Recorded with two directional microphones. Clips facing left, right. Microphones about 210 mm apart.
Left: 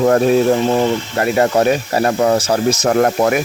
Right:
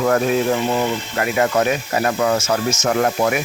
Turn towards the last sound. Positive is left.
turn(degrees=45)  # may be behind; listen again after turning